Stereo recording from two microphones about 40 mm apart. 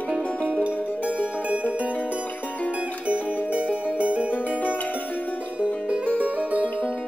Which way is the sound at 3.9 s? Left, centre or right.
Right.